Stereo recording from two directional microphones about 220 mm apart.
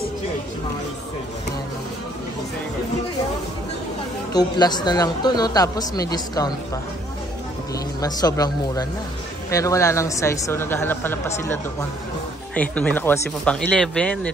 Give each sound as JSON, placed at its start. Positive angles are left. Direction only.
{"t": 4.3, "sound": "speech", "side_deg": 20}
{"t": 8.0, "sound": "speech", "side_deg": 15}